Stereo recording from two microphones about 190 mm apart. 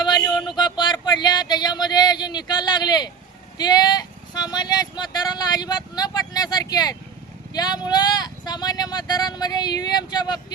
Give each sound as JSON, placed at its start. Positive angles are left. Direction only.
{"t": 0.0, "sound": "speech", "side_deg": 20}